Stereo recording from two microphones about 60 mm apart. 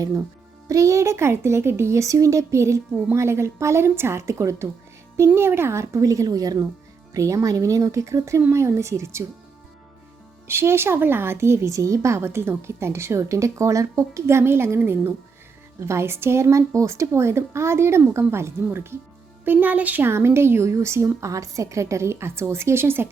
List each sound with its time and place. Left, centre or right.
0.7 s speech: right
7.1 s speech: right
10.4 s speech: right
15.8 s speech: right
19.5 s a woman's voice: right
20.1 s speech: right